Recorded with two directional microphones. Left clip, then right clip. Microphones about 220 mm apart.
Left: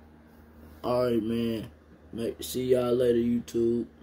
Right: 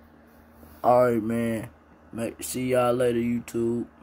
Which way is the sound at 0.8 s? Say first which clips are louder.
Right 7 dB; 20° right (ahead or behind).